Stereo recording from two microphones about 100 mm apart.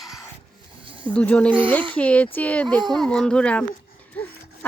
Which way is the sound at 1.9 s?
15° left (ahead or behind).